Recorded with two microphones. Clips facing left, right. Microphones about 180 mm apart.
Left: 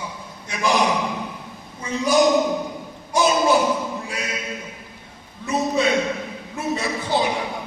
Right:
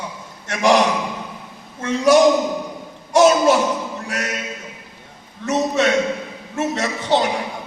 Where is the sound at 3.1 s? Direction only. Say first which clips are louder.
Right 5 dB; 85° right.